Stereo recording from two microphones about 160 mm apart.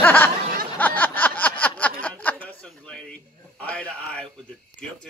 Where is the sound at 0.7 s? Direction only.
10° left (ahead or behind).